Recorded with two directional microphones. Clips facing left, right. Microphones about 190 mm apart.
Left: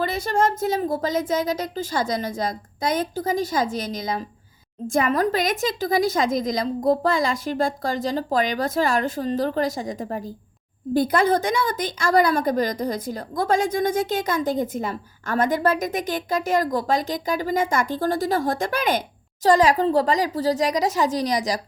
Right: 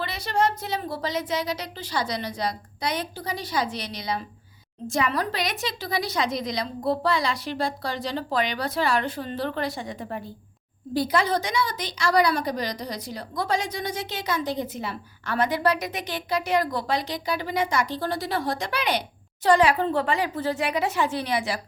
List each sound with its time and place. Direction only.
0.0 s a woman's voice: 45° left (ahead or behind)
10.9 s a woman's voice: 50° left (ahead or behind)